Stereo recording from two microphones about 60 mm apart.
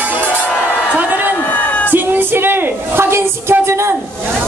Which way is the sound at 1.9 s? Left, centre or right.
Right.